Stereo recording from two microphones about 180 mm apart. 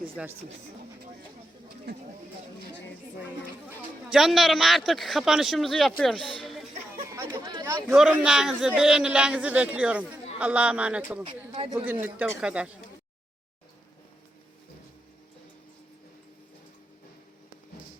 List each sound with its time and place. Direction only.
0.2 s a man's voice: 5° right (ahead or behind)
1.9 s speech: 60° right (ahead or behind)
4.1 s a man's voice: centre (ahead or behind)
7.1 s chatter: 15° right (ahead or behind)
7.9 s a man's voice: 5° right (ahead or behind)
11.2 s speech: 30° right (ahead or behind)
11.9 s speech: 10° right (ahead or behind)